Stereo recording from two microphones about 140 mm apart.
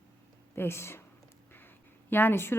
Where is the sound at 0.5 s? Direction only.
15° left (ahead or behind).